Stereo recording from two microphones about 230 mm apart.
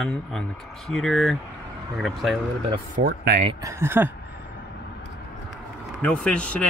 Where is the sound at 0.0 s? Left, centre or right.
Centre.